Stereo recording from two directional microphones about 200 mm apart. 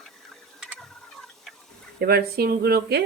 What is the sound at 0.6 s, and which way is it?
Clock, centre (ahead or behind).